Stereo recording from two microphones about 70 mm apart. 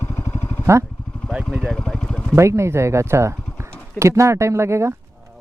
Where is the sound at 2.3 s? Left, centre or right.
Right.